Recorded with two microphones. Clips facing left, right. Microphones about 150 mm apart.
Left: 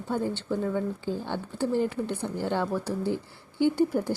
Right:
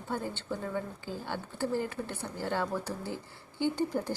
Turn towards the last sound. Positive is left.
turn(degrees=10)  # may be behind; listen again after turning